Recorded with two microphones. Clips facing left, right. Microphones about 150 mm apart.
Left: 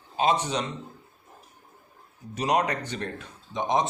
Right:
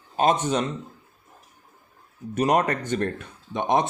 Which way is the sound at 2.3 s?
50° right (ahead or behind).